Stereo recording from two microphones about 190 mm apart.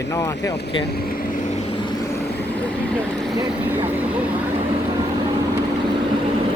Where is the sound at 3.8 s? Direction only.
10° right (ahead or behind).